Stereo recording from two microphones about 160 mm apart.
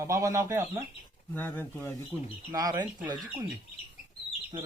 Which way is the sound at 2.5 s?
25° right (ahead or behind).